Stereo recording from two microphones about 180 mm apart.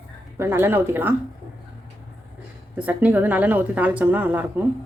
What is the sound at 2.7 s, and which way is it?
Speech, 10° right (ahead or behind).